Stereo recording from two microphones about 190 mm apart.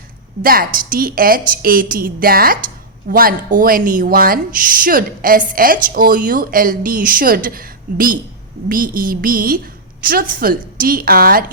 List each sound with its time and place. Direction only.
0.4 s speech: 50° right (ahead or behind)